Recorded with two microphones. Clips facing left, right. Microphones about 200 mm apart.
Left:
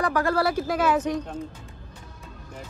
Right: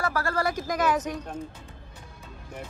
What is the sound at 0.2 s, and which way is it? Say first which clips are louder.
Speech: left 4 dB; 10° left (ahead or behind).